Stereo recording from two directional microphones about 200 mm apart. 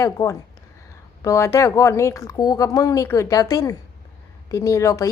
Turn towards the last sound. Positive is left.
turn(degrees=15)  # may be behind; listen again after turning